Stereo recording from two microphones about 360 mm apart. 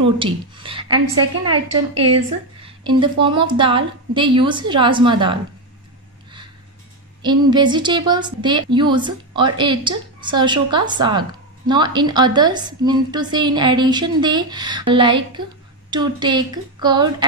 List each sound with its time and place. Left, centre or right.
0.0 s a woman's voice: centre
2.0 s speech: right
2.6 s a woman's voice: centre
7.2 s a woman's voice: centre